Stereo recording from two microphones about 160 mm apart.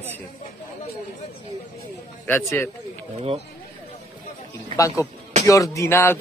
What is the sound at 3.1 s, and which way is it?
Speech, 40° right (ahead or behind).